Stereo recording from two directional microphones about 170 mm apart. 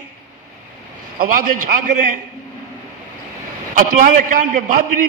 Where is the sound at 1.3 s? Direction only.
50° right (ahead or behind).